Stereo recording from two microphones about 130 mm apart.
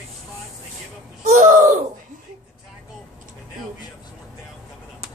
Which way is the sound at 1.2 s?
70° right (ahead or behind).